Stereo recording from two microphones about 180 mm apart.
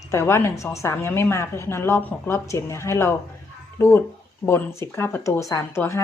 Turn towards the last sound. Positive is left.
turn(degrees=15)  # may be behind; listen again after turning